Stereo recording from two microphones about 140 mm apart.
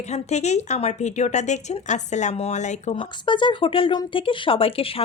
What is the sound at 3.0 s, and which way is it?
A woman's voice, 35° left (ahead or behind).